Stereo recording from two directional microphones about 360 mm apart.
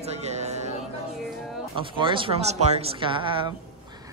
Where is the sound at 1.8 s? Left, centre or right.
Centre.